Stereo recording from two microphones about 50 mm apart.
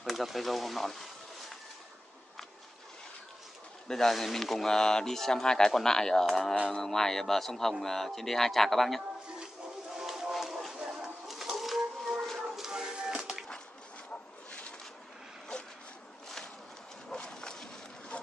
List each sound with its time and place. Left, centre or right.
0.0 s speech: centre
3.8 s speech: centre
9.9 s chicken: centre
12.4 s music: centre
17.1 s a sound: centre